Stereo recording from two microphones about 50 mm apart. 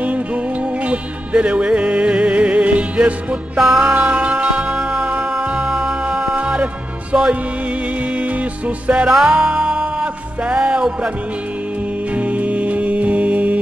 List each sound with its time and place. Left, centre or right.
0.8 s music: right
3.5 s music: centre
3.8 s music: right
8.6 s music: right
9.0 s music: centre
12.2 s music: right